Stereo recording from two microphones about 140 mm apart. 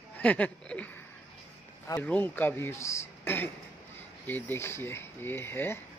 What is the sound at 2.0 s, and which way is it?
Speech, 10° left (ahead or behind).